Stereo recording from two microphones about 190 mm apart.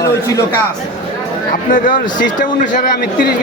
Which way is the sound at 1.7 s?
45° left (ahead or behind).